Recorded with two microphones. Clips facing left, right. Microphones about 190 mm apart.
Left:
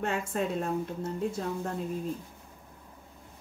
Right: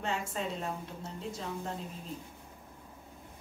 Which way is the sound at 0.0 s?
55° left (ahead or behind).